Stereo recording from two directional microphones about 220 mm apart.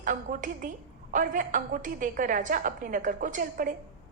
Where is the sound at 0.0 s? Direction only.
35° right (ahead or behind).